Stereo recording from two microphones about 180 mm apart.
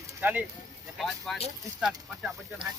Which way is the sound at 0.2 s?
10° right (ahead or behind).